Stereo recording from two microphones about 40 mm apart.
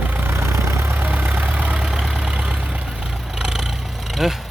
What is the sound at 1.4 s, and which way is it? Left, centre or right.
Vehicle, right.